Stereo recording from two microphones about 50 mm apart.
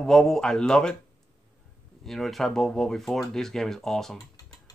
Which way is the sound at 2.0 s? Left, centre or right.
Centre.